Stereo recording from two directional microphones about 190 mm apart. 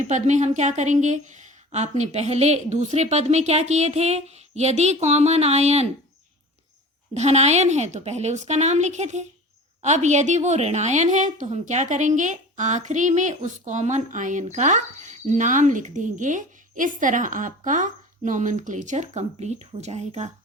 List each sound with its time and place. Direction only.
0.0 s a woman's voice: 40° right (ahead or behind)
7.1 s a woman's voice: 35° right (ahead or behind)